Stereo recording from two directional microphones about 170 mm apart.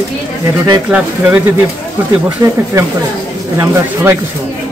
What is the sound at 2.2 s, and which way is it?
A man's voice, 15° right (ahead or behind).